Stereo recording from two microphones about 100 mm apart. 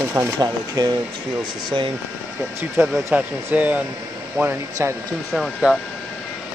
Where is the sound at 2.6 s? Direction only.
25° right (ahead or behind).